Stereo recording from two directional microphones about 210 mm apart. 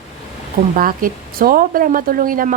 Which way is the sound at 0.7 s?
40° right (ahead or behind).